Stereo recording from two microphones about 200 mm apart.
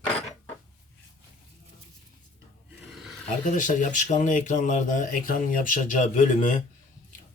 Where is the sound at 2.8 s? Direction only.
Centre (ahead or behind).